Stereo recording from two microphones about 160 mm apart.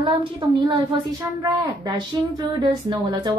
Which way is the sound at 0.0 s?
35° right (ahead or behind).